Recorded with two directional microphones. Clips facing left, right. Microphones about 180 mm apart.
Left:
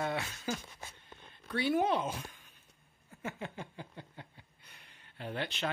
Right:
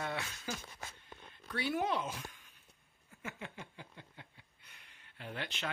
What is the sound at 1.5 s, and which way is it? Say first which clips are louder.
Speech: left 5 dB; 25° left (ahead or behind).